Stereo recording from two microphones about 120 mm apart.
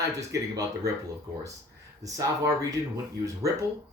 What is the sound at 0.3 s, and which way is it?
Speech, 30° right (ahead or behind).